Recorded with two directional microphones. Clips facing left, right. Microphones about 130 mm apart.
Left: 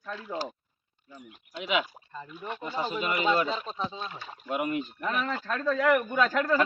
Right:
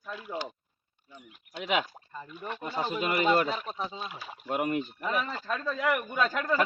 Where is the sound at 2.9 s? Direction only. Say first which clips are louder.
Right 1 dB; 45° right (ahead or behind).